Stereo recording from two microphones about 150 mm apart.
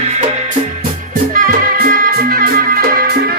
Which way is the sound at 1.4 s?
70° right (ahead or behind).